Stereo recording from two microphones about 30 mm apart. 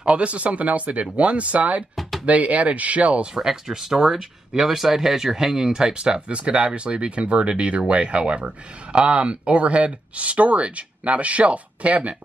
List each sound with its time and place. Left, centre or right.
0.0 s speech: right
2.0 s a sound: centre
2.2 s speech: right
3.4 s speech: centre
6.3 s speech: right